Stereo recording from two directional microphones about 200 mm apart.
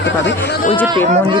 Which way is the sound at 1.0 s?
35° right (ahead or behind).